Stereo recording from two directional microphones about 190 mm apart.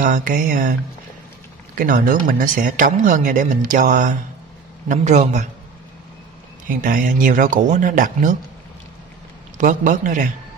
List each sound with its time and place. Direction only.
0.0 s speech: 45° right (ahead or behind)
1.8 s a man's voice: 45° right (ahead or behind)
6.7 s speech: 45° right (ahead or behind)
9.6 s speech: 45° right (ahead or behind)